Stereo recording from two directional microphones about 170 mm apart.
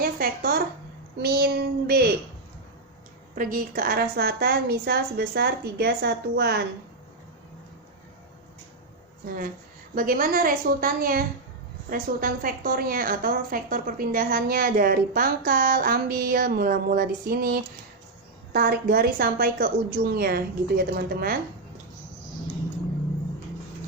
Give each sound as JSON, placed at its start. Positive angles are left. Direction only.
{"t": 0.0, "sound": "a woman's voice", "side_deg": -65}
{"t": 3.3, "sound": "a woman's voice", "side_deg": -55}
{"t": 9.9, "sound": "a woman's voice", "side_deg": -55}